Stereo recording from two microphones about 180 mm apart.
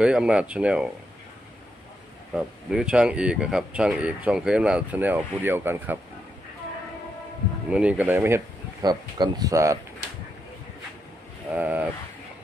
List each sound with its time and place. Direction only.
0.0 s speech: 5° right (ahead or behind)
2.3 s speech: 5° right (ahead or behind)
7.7 s speech: 10° right (ahead or behind)
11.5 s speech: 10° right (ahead or behind)